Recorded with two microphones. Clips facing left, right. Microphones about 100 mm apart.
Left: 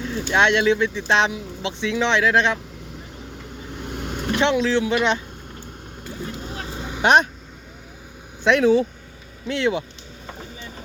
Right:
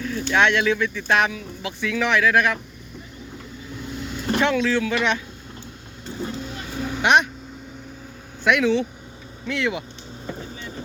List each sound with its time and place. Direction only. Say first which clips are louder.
0.0 s speech: even; 20° left (ahead or behind)
3.7 s vehicle: left 1 dB; 60° left (ahead or behind)
4.4 s speech: left 1 dB; 20° left (ahead or behind)
6.7 s vehicle: right 3 dB; 20° left (ahead or behind)
7.0 s speech: left 2 dB; 35° left (ahead or behind)
8.4 s speech: left 3 dB; 35° left (ahead or behind)